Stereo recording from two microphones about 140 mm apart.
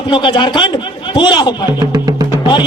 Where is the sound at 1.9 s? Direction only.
30° right (ahead or behind).